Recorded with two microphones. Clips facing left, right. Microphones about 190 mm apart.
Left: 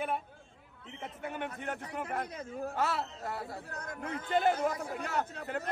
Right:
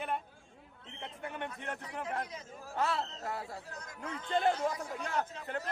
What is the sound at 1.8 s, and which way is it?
A man's voice, 60° left (ahead or behind).